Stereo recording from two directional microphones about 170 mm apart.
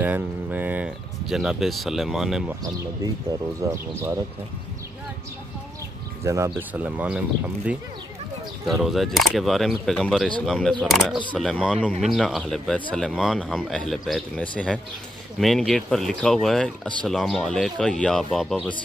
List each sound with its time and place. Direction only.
0.0 s speech: 10° right (ahead or behind)
3.7 s speech: 15° right (ahead or behind)
6.2 s speech: 15° right (ahead or behind); by 18.7 s centre (ahead or behind)